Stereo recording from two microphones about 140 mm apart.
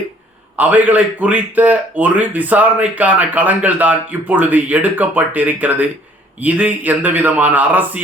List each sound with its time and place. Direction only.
0.5 s a man's voice: 10° right (ahead or behind)